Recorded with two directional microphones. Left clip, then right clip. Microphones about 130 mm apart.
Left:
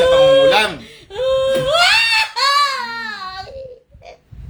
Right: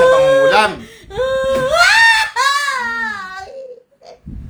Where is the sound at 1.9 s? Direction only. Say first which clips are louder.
Right 4 dB; 45° right (ahead or behind).